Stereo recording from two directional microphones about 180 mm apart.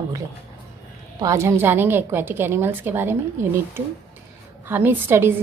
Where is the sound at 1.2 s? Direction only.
15° right (ahead or behind).